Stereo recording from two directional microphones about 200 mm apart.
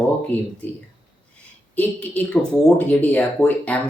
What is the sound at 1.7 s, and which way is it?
Speech, 10° left (ahead or behind).